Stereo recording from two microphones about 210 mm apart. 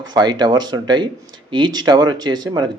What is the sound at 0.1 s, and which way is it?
Speech, 20° right (ahead or behind).